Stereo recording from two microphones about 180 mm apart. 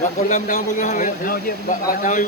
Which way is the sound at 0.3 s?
45° left (ahead or behind).